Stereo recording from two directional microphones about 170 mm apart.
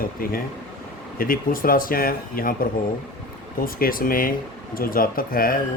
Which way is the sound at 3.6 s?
60° left (ahead or behind).